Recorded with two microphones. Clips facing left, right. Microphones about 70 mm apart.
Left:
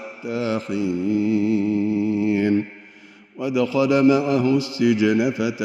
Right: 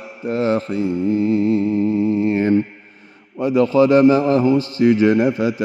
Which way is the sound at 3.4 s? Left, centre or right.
Right.